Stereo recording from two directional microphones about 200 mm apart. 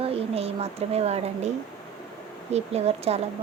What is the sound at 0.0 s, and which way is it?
A woman's voice, 30° right (ahead or behind).